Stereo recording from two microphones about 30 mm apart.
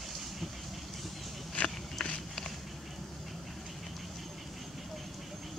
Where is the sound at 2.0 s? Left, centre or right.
Centre.